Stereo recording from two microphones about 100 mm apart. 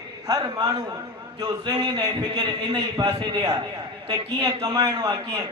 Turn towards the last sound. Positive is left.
turn(degrees=-50)  # may be behind; listen again after turning